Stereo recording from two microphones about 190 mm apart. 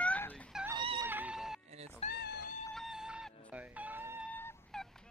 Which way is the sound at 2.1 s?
60° left (ahead or behind).